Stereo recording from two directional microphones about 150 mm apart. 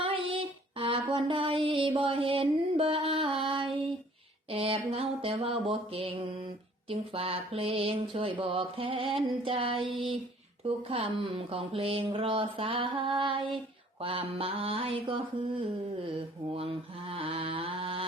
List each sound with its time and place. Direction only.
0.0 s child singing: 35° right (ahead or behind)
2.0 s music: 35° right (ahead or behind)
4.5 s a sound: 40° right (ahead or behind)
16.6 s mantra: 40° right (ahead or behind)